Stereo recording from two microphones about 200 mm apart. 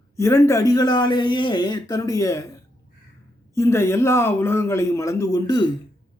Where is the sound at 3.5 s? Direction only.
15° left (ahead or behind).